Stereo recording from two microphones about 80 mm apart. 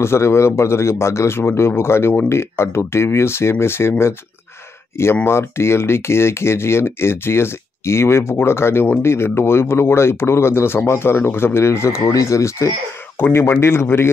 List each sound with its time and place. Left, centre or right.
0.0 s speech: left
4.9 s speech: left